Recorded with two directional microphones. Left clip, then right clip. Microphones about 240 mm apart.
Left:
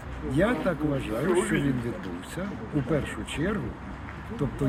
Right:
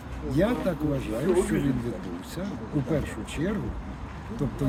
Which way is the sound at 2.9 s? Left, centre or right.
Centre.